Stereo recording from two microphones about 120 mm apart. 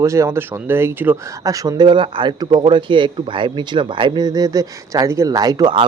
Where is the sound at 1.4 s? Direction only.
30° right (ahead or behind).